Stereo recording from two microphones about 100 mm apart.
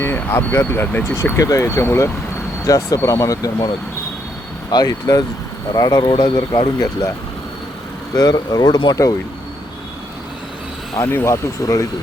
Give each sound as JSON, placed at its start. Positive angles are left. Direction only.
{"t": 0.0, "sound": "speech", "side_deg": 20}
{"t": 4.7, "sound": "speech", "side_deg": 40}
{"t": 8.1, "sound": "speech", "side_deg": 40}
{"t": 11.0, "sound": "speech", "side_deg": 25}
{"t": 11.6, "sound": "speech", "side_deg": 35}